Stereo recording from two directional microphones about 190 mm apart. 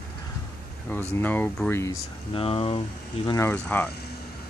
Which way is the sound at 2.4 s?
30° left (ahead or behind).